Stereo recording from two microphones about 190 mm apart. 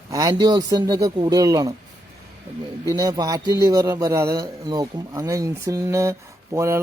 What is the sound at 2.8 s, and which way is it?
A man's voice, 20° right (ahead or behind).